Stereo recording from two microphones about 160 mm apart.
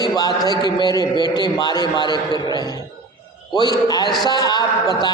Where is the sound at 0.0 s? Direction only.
25° left (ahead or behind).